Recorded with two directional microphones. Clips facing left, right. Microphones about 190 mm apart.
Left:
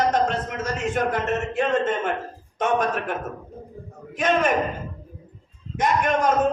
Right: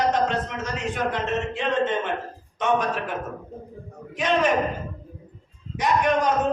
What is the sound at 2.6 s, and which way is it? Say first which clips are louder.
Speech: left 1 dB; 50° left (ahead or behind).